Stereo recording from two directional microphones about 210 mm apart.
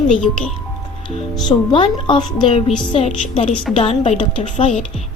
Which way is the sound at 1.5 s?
25° left (ahead or behind).